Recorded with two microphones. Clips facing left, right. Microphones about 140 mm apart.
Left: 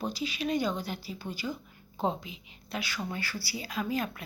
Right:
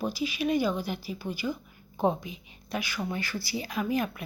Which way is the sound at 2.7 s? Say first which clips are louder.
Right 3 dB; 15° right (ahead or behind).